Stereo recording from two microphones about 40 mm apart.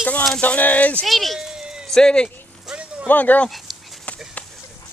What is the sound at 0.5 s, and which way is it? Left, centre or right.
Speech, left.